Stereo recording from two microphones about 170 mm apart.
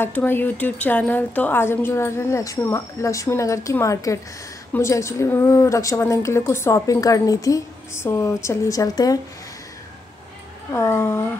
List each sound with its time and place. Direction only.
0.0 s a woman's voice: 10° left (ahead or behind)
10.7 s a woman's voice: 15° left (ahead or behind)